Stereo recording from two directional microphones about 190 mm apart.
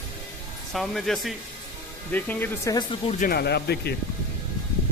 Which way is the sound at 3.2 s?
55° left (ahead or behind).